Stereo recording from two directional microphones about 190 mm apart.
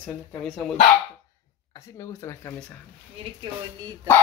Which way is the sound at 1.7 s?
15° left (ahead or behind).